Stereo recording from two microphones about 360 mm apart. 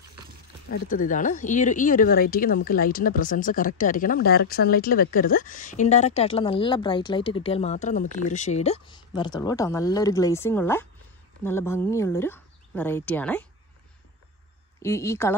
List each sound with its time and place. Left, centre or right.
0.7 s speech: left; by 13.5 s centre
14.8 s speech: centre